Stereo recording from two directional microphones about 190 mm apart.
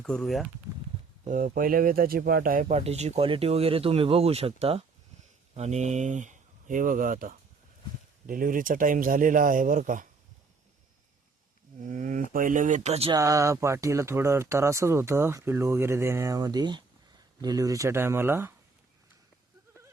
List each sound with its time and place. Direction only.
0.0 s speech: 5° left (ahead or behind)
1.3 s speech: 45° right (ahead or behind)
11.9 s a sound: 45° right (ahead or behind)
12.3 s speech: 45° right (ahead or behind)
13.1 s speech: 15° right (ahead or behind)